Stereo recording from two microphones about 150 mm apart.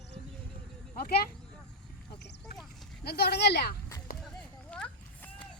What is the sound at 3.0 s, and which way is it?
Speech, 90° left.